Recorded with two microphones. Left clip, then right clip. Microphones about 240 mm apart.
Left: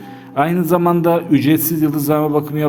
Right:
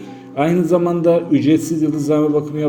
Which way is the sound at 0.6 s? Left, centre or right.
Left.